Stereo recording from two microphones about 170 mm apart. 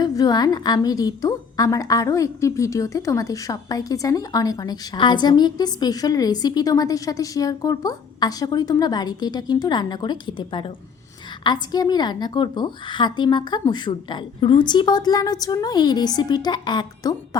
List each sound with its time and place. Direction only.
0.0 s a woman's voice: 20° left (ahead or behind)